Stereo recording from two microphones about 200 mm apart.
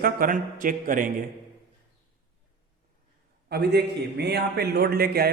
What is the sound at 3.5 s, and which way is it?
A man's voice, 55° right (ahead or behind).